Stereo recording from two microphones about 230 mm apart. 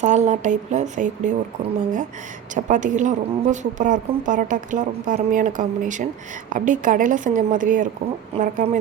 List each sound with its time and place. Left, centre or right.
0.0 s a woman's voice: right
2.6 s a woman's voice: right